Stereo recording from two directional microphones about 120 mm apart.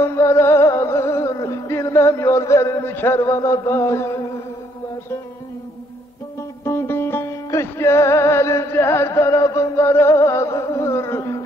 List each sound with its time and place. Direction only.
0.0 s music: 20° left (ahead or behind)
3.2 s music: 30° left (ahead or behind)
6.6 s music: 25° left (ahead or behind)